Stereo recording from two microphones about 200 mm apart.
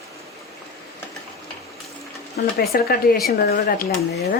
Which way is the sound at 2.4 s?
50° left (ahead or behind).